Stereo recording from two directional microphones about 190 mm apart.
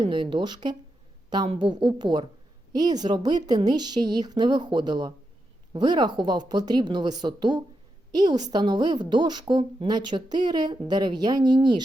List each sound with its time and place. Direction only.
0.0 s a woman's voice: 25° right (ahead or behind)